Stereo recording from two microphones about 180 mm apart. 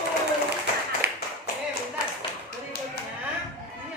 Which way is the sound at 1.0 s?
60° right (ahead or behind).